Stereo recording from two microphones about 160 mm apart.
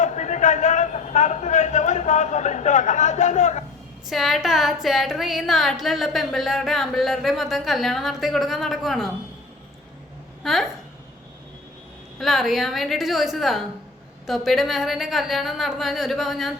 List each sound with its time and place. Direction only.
0.0 s a sound: 50° left (ahead or behind)
4.0 s a woman's voice: centre (ahead or behind)
10.4 s a woman's voice: centre (ahead or behind)
12.2 s a woman's voice: centre (ahead or behind)